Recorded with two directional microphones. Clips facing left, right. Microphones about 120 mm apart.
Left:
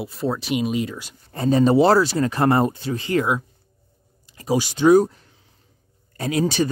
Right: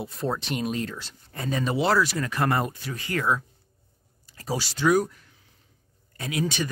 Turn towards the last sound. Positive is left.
turn(degrees=35)  # may be behind; listen again after turning